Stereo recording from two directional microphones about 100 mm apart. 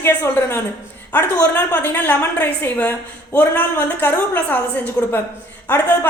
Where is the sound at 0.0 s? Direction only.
20° left (ahead or behind).